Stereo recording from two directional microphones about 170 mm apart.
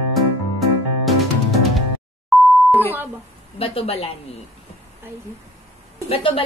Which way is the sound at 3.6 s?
35° left (ahead or behind).